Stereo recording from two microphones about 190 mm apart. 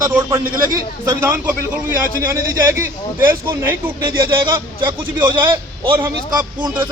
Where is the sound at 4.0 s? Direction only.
25° right (ahead or behind).